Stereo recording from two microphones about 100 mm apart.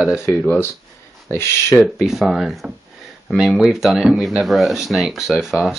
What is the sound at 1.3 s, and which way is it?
Speech, 25° left (ahead or behind).